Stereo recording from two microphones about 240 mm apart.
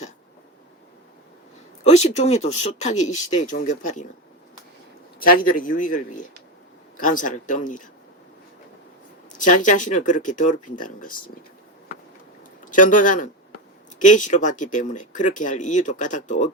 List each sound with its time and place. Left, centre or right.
1.8 s speech: left
5.2 s speech: left
9.4 s speech: left
12.6 s a man's voice: left